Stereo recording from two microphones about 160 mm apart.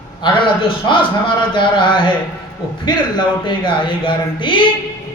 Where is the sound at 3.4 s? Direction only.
30° left (ahead or behind).